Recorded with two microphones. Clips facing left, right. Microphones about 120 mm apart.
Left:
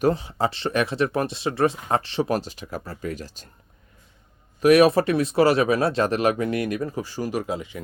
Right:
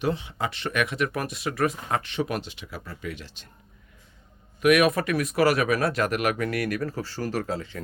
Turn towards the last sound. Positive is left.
turn(degrees=15)  # may be behind; listen again after turning